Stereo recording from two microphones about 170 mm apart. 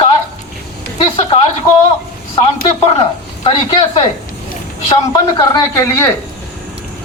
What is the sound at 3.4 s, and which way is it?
Speech, 30° left (ahead or behind).